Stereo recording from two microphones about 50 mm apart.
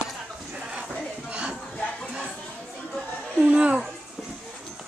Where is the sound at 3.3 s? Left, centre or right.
Right.